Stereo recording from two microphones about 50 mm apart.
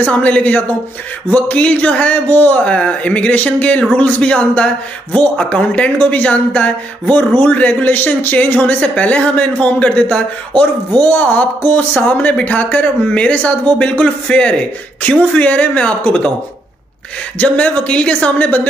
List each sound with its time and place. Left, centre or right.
0.0 s a man's voice: left
17.4 s a man's voice: left